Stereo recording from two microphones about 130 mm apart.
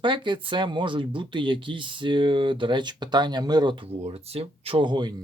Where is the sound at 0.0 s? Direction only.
40° right (ahead or behind).